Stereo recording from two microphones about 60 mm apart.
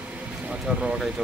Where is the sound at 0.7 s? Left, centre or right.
Centre.